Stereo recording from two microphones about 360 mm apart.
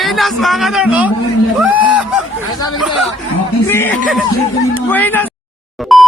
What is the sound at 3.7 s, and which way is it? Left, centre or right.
A man's voice, centre.